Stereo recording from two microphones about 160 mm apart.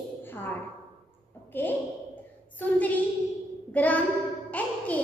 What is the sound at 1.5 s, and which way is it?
Speech, 10° left (ahead or behind).